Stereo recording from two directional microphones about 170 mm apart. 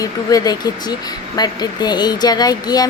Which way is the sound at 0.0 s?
20° left (ahead or behind).